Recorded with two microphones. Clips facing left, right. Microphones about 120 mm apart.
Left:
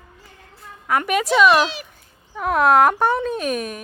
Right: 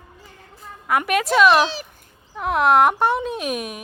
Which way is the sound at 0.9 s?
Centre (ahead or behind).